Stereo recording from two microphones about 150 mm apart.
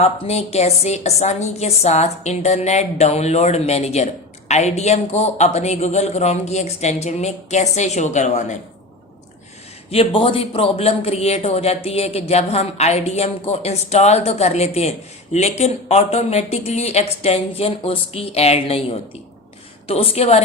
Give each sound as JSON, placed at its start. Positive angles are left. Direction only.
{"t": 0.0, "sound": "a woman's voice", "side_deg": 45}
{"t": 9.9, "sound": "a woman's voice", "side_deg": 40}